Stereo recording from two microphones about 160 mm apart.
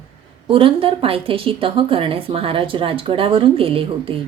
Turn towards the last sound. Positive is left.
turn(degrees=-35)  # may be behind; listen again after turning